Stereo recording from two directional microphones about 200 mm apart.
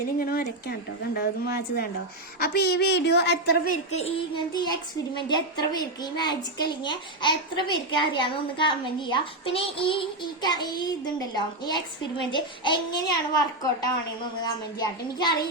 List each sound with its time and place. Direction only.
0.0 s a woman's voice: 50° left (ahead or behind)
4.0 s a woman's voice: 25° left (ahead or behind)